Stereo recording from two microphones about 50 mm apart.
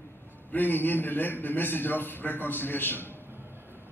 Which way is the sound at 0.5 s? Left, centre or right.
Left.